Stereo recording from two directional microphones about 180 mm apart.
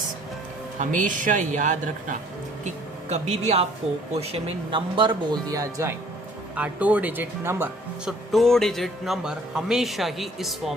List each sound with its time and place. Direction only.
0.8 s speech: 45° right (ahead or behind); by 5.9 s 20° right (ahead or behind)
6.6 s speech: 10° right (ahead or behind)
8.3 s speech: centre (ahead or behind)